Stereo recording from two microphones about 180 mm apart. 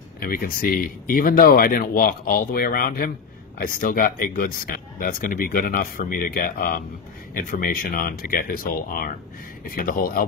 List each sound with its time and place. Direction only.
0.2 s speech: 50° left (ahead or behind)